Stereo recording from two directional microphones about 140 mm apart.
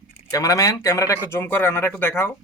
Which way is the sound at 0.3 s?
25° left (ahead or behind).